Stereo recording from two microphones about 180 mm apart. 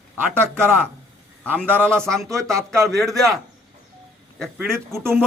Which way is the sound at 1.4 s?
10° left (ahead or behind).